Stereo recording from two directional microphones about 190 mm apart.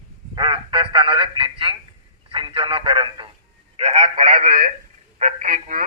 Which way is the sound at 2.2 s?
30° right (ahead or behind).